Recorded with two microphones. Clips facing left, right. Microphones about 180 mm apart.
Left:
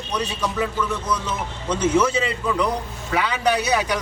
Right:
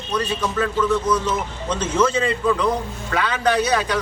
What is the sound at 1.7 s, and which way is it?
A man's voice, 10° left (ahead or behind).